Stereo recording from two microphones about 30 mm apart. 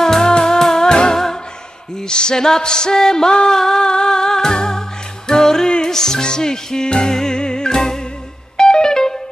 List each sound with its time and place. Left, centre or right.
0.0 s music: centre
0.3 s music: left
1.1 s music: centre
2.0 s music: left